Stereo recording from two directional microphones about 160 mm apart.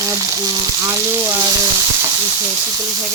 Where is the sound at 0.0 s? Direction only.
20° right (ahead or behind).